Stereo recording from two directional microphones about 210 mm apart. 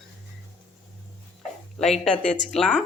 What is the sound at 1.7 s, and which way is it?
Speech, centre (ahead or behind).